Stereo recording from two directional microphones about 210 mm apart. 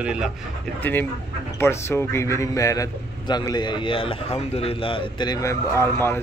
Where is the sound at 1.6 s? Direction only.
10° left (ahead or behind).